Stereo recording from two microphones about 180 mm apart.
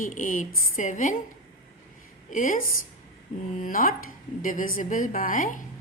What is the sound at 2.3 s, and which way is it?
A woman's voice, 45° left (ahead or behind).